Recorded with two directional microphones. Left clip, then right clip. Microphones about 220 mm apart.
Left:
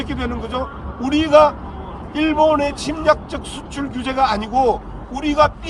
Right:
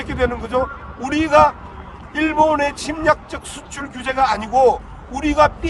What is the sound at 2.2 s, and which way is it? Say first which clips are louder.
A man's voice: even; 30° right (ahead or behind).